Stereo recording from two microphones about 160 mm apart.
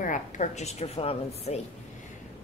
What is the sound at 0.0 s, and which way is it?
Speech, 50° left (ahead or behind).